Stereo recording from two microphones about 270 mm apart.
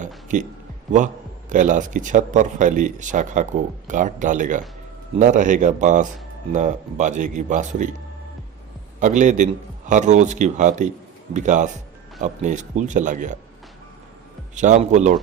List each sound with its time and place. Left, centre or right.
0.3 s speech: right
9.0 s speech: right
14.5 s speech: right